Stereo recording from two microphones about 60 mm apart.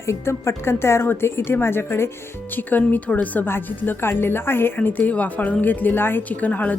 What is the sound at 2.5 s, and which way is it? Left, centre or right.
A woman's voice, left.